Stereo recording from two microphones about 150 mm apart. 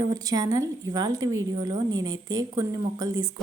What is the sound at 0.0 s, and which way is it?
A woman's voice, 25° right (ahead or behind).